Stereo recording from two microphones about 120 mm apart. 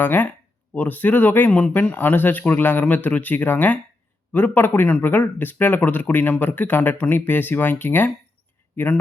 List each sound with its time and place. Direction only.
0.0 s speech: 15° left (ahead or behind)